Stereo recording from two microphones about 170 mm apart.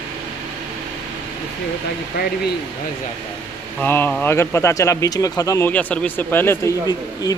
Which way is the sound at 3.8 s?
10° left (ahead or behind).